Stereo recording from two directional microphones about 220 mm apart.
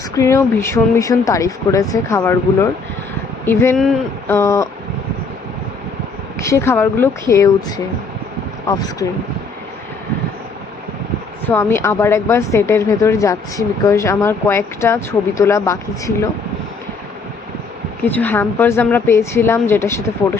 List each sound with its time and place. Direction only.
0.1 s speech: 15° left (ahead or behind)
6.4 s speech: 15° left (ahead or behind)
8.7 s speech: 15° left (ahead or behind)
11.4 s speech: 10° left (ahead or behind)
18.0 s speech: 10° left (ahead or behind)